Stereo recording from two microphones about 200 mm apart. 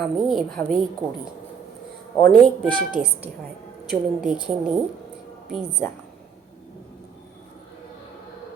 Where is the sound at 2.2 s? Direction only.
5° left (ahead or behind).